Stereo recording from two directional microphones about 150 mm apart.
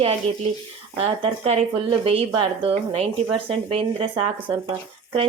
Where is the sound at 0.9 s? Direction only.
45° right (ahead or behind).